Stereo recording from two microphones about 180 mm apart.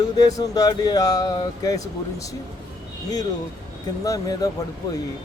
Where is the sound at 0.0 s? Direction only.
20° left (ahead or behind).